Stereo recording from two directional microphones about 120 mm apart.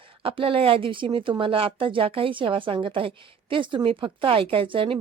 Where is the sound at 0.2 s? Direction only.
50° right (ahead or behind).